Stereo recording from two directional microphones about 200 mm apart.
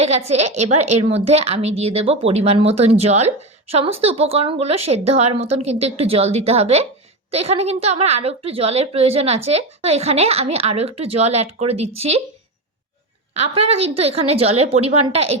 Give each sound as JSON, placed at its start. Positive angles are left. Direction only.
{"t": 0.0, "sound": "a woman's voice", "side_deg": -30}
{"t": 13.3, "sound": "a woman's voice", "side_deg": -30}